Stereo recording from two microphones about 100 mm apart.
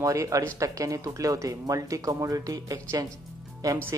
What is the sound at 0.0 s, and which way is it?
Speech, 35° right (ahead or behind).